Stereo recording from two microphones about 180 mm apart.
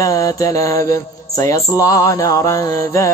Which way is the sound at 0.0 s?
20° left (ahead or behind).